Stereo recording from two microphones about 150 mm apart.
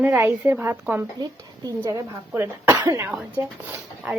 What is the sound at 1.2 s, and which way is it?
Speech, 25° right (ahead or behind).